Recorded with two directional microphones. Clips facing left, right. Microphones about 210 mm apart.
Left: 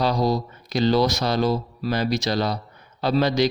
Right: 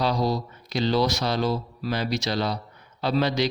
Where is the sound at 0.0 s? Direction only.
45° left (ahead or behind).